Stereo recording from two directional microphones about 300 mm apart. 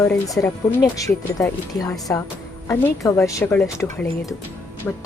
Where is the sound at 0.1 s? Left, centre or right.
Centre.